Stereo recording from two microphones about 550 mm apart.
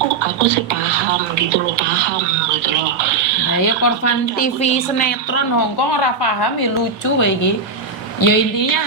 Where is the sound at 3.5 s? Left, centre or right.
Left.